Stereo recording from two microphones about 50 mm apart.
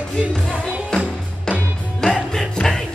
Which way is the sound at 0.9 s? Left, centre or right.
Centre.